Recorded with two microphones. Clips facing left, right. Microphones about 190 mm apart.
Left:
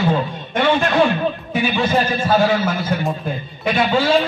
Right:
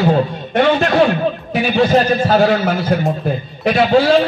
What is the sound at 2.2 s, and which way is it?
Speech, 55° right (ahead or behind).